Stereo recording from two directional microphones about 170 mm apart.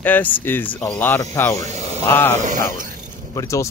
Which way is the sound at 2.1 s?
15° left (ahead or behind).